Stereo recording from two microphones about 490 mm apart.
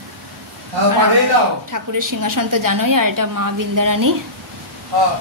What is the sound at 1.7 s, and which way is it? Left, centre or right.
A woman's voice, right.